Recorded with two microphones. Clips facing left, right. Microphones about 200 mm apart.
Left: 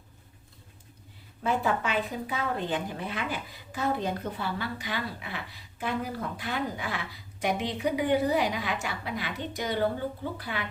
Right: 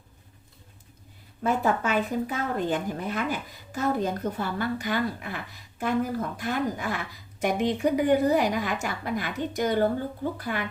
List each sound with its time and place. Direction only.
1.5 s a woman's voice: 45° right (ahead or behind)